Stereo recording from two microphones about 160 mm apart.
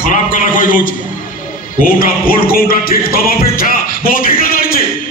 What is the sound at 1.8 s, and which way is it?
Music, 65° left (ahead or behind).